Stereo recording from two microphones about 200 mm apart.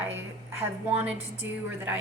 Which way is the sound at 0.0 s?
10° right (ahead or behind).